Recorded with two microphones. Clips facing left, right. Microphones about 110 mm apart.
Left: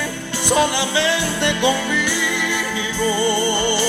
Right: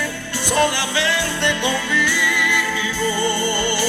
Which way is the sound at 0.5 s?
15° left (ahead or behind).